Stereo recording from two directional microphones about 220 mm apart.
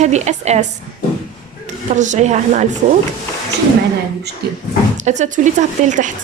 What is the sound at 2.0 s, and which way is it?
Speech, 35° right (ahead or behind).